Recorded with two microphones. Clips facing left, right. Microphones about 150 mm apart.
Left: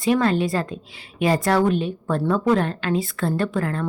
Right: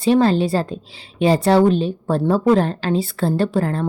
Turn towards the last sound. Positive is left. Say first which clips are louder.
# right 4 dB
turn(degrees=-30)  # may be behind; listen again after turning